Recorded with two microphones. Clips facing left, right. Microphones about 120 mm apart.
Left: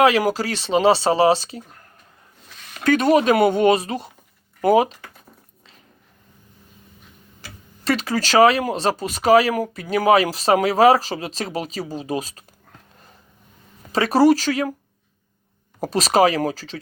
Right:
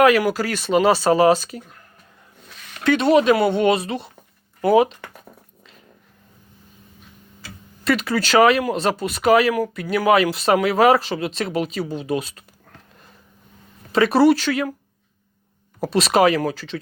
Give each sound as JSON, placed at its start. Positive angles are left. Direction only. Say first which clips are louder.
{"t": 0.0, "sound": "speech", "louder": "right 1 dB", "side_deg": 35}
{"t": 2.8, "sound": "speech", "louder": "right 1 dB", "side_deg": 45}
{"t": 7.9, "sound": "speech", "louder": "right 1 dB", "side_deg": 35}
{"t": 13.9, "sound": "speech", "louder": "right 1 dB", "side_deg": 35}
{"t": 15.8, "sound": "speech", "louder": "even", "side_deg": 40}